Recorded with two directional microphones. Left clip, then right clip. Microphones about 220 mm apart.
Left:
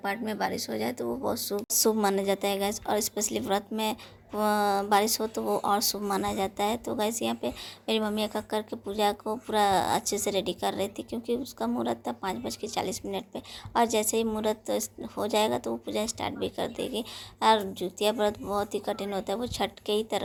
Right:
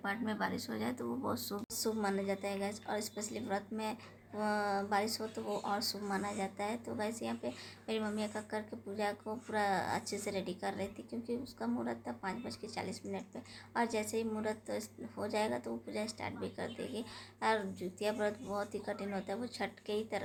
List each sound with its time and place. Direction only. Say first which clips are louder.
0.0 s a woman's voice: left 7 dB; 30° left (ahead or behind)